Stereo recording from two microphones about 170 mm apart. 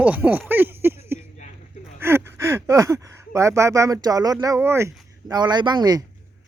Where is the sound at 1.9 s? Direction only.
15° right (ahead or behind).